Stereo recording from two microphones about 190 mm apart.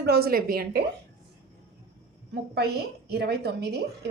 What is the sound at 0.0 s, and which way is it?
Speech, 55° right (ahead or behind).